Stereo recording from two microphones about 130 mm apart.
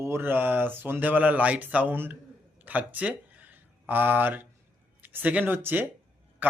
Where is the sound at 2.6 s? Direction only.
15° right (ahead or behind).